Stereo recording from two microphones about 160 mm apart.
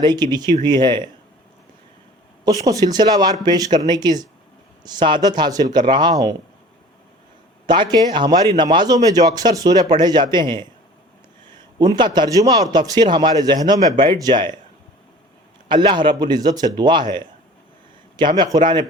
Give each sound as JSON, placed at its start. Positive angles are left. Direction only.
{"t": 0.0, "sound": "speech", "side_deg": -25}
{"t": 2.4, "sound": "speech", "side_deg": -20}
{"t": 7.7, "sound": "a man's voice", "side_deg": -30}
{"t": 15.7, "sound": "a man's voice", "side_deg": -30}